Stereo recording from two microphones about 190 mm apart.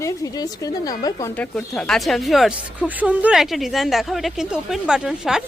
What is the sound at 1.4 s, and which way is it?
Speech, 5° left (ahead or behind).